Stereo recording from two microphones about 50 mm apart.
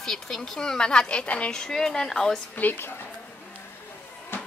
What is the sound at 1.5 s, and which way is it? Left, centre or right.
Speech, centre.